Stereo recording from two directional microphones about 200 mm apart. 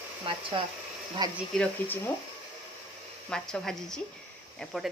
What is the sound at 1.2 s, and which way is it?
Speech, 20° right (ahead or behind).